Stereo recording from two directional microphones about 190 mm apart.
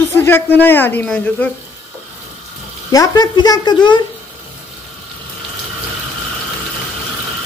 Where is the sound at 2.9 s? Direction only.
20° left (ahead or behind).